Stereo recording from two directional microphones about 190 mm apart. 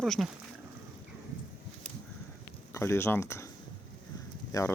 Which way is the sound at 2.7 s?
15° left (ahead or behind).